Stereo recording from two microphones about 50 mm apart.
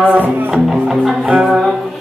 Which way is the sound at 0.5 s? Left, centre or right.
Centre.